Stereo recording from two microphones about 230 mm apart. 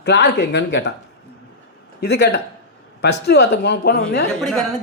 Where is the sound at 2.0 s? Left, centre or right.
Left.